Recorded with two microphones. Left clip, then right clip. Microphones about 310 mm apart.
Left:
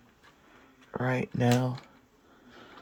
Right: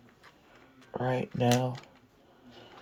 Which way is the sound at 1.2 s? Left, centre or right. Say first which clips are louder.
Right 1 dB; left.